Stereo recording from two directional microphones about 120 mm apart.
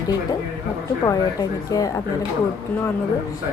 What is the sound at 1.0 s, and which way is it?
Speech, 30° left (ahead or behind).